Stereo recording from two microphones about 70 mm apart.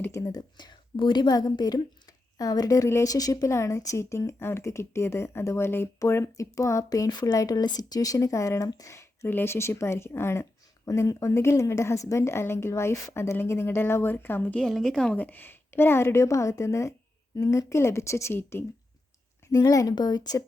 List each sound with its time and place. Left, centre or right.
0.3 s speech: left
3.5 s a woman's voice: left
7.1 s speech: left
7.3 s a woman's voice: left
9.2 s a woman's voice: left
13.3 s speech: left
14.6 s a woman's voice: centre
15.1 s a woman's voice: left
19.5 s speech: left
20.0 s speech: left